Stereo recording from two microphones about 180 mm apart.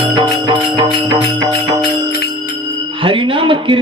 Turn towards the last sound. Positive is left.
turn(degrees=-30)  # may be behind; listen again after turning